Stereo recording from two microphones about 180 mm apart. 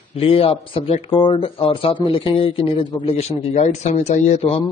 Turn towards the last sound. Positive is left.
turn(degrees=35)  # may be behind; listen again after turning